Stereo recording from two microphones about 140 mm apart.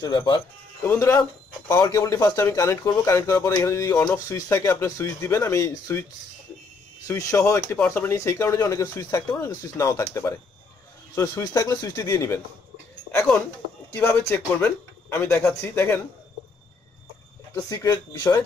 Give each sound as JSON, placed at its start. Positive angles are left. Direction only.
{"t": 0.0, "sound": "speech", "side_deg": 30}
{"t": 0.8, "sound": "speech", "side_deg": 20}
{"t": 7.1, "sound": "speech", "side_deg": 25}
{"t": 13.9, "sound": "speech", "side_deg": 15}
{"t": 17.6, "sound": "speech", "side_deg": 25}